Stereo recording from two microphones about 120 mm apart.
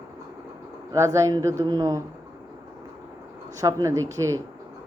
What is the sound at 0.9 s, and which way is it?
Speech, 25° right (ahead or behind).